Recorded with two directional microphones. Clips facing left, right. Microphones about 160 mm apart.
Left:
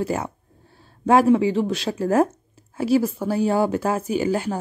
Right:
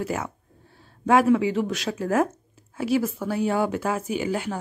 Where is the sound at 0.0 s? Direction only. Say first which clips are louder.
Left 4 dB; 30° left (ahead or behind).